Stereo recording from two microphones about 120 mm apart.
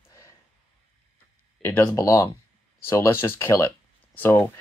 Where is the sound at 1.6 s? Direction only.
20° left (ahead or behind).